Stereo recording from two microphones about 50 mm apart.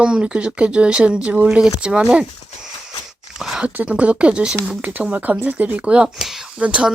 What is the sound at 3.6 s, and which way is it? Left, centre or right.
Speech, right.